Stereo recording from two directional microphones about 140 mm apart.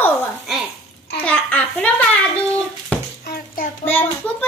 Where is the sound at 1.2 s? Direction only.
10° left (ahead or behind).